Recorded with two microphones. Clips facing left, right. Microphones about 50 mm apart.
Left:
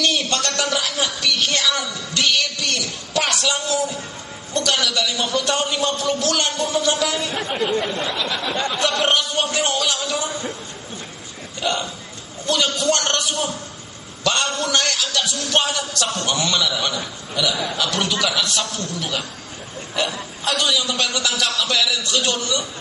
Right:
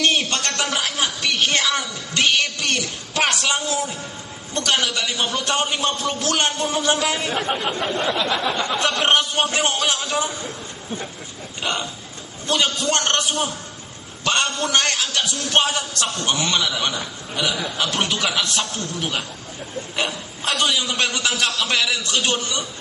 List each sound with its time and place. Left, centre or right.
0.0 s a woman's voice: right
11.6 s a woman's voice: right